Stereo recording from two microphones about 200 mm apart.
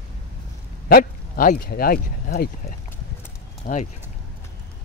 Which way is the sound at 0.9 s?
45° left (ahead or behind).